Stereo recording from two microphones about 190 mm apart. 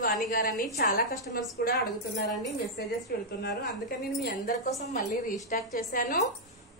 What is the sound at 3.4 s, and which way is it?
A woman's voice, 60° left (ahead or behind).